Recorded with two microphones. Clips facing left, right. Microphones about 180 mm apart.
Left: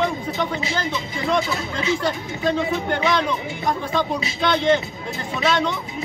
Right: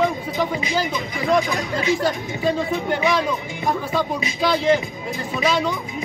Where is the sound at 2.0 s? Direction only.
5° right (ahead or behind).